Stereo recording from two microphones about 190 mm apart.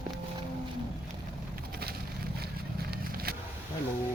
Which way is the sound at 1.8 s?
55° right (ahead or behind).